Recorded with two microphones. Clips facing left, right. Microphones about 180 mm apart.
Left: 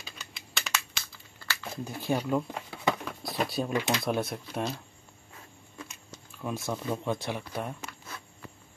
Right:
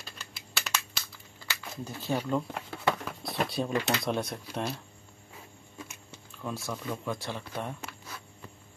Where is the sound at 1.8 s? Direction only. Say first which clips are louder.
Left 2 dB; 15° left (ahead or behind).